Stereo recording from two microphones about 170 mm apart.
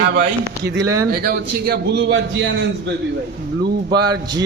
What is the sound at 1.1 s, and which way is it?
A man's voice, 65° right (ahead or behind).